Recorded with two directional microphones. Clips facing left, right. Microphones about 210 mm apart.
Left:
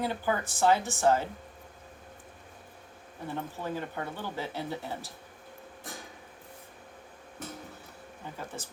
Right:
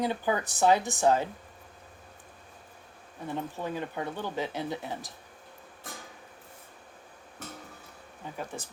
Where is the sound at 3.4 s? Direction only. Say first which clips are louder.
Right 1 dB; 15° right (ahead or behind).